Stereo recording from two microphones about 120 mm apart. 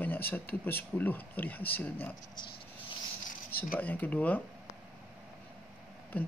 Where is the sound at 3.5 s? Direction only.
15° left (ahead or behind).